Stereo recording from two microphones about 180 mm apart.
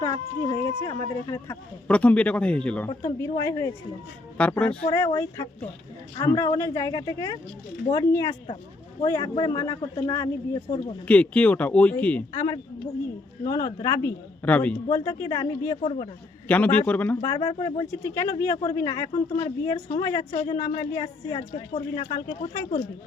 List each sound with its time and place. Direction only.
0.0 s speech: 20° left (ahead or behind)
3.0 s speech: 20° left (ahead or behind)
5.0 s a man's voice: 20° left (ahead or behind)
11.0 s speech: 5° left (ahead or behind)
13.4 s speech: 20° left (ahead or behind)
14.8 s a man's voice: 20° left (ahead or behind)
15.8 s speech: 35° left (ahead or behind)
16.5 s speech: 10° left (ahead or behind)
17.2 s a man's voice: 20° left (ahead or behind)
18.0 s a man's voice: 15° left (ahead or behind)
22.4 s speech: 35° left (ahead or behind)